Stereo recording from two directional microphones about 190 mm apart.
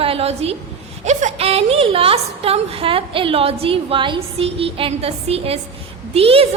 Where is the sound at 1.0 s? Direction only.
35° right (ahead or behind).